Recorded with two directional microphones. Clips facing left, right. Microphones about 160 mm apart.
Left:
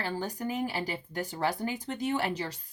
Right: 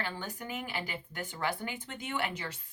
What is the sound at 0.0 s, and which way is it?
Speech, 35° left (ahead or behind).